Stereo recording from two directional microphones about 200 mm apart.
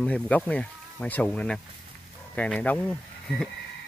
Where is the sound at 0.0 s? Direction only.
5° left (ahead or behind).